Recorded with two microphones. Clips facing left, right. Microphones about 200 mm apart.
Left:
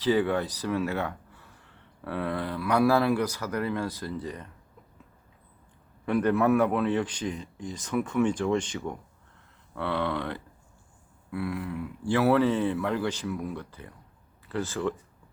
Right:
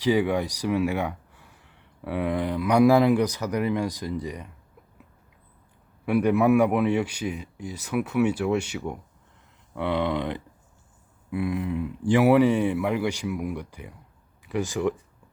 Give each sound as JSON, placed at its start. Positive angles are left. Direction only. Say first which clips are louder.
{"t": 0.0, "sound": "speech", "louder": "right 2 dB", "side_deg": -15}
{"t": 6.1, "sound": "speech", "louder": "right 3 dB", "side_deg": -10}